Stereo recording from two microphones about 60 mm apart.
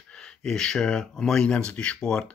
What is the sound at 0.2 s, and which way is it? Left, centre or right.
Speech, centre.